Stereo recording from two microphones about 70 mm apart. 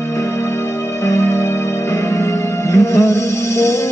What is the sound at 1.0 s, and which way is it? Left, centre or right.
Music, left.